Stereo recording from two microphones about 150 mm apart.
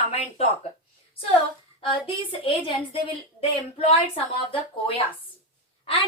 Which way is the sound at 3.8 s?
40° left (ahead or behind).